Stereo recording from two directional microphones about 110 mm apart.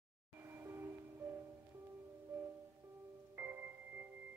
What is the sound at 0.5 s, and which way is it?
Music, 20° right (ahead or behind).